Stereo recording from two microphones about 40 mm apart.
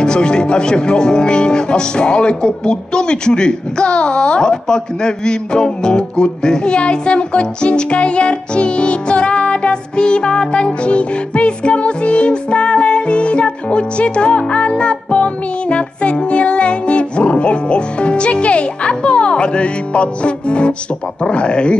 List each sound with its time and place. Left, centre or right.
0.0 s speech: left